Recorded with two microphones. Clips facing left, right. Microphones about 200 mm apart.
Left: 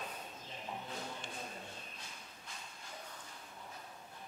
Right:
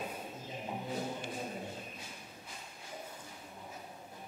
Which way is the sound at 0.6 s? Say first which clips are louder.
Right 7 dB; 20° right (ahead or behind).